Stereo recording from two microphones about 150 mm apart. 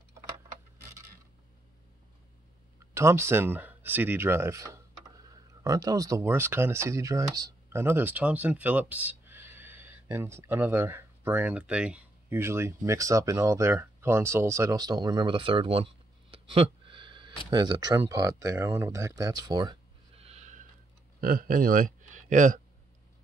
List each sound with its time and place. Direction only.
2.8 s speech: 20° right (ahead or behind)
20.2 s a sound: 45° right (ahead or behind)
21.2 s speech: 70° right (ahead or behind)